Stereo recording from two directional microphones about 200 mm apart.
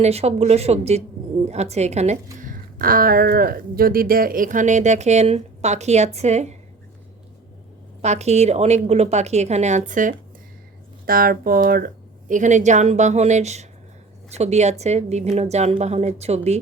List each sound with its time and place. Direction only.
0.0 s a woman's voice: 30° right (ahead or behind)
8.0 s a woman's voice: 35° right (ahead or behind)